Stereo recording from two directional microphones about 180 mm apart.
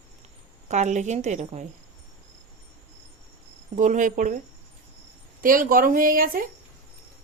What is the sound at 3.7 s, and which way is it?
Speech, 45° right (ahead or behind).